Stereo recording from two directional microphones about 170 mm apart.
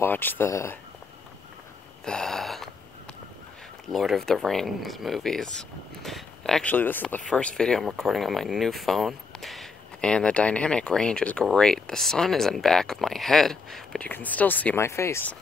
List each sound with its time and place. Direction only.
0.0 s speech: 10° left (ahead or behind)
2.0 s a sound: 5° left (ahead or behind)
3.9 s speech: centre (ahead or behind)